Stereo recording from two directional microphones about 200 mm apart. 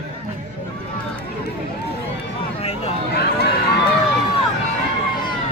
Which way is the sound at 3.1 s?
50° left (ahead or behind).